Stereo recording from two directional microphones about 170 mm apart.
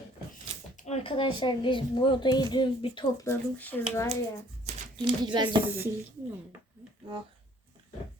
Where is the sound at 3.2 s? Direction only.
10° left (ahead or behind).